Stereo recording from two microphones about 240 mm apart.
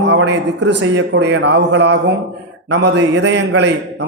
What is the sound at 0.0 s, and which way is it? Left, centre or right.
A man's voice, right.